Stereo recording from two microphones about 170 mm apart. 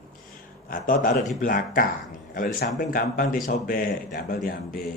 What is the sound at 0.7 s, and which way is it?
Speech, 55° left (ahead or behind).